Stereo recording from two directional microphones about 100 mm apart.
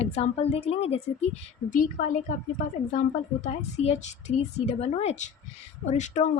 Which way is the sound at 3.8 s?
90° left.